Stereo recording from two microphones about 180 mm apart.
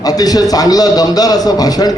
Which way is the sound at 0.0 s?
20° left (ahead or behind).